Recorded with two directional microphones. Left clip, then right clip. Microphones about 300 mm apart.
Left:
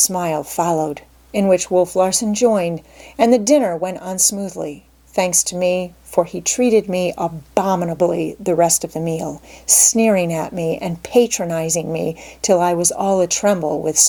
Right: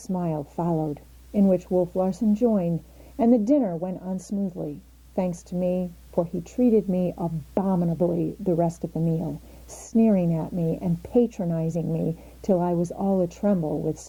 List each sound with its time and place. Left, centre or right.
0.1 s speech: centre
1.7 s speech: left
2.0 s speech: centre
8.9 s speech: left
9.6 s speech: centre
13.6 s speech: centre